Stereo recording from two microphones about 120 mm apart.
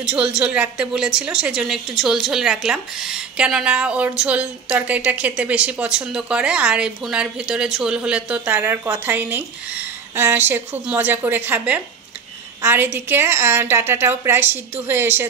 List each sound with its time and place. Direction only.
0.0 s a woman's voice: 5° right (ahead or behind)